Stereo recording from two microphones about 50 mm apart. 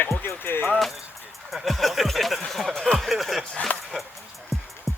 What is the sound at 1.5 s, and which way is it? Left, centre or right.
Snicker, centre.